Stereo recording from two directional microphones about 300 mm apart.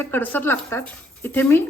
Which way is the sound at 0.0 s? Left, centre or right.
Centre.